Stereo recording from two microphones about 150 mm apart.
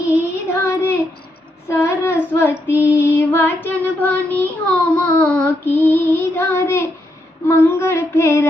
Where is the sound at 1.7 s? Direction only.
15° left (ahead or behind).